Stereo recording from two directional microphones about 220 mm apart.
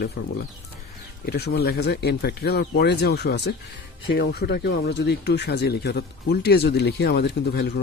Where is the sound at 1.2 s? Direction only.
45° left (ahead or behind).